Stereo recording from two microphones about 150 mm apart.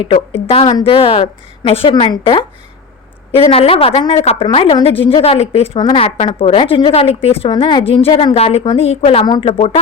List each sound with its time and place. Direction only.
0.0 s a woman's voice: 45° left (ahead or behind)
6.1 s a woman's voice: 45° left (ahead or behind)